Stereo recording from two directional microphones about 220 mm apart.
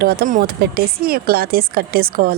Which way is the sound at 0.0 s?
45° right (ahead or behind).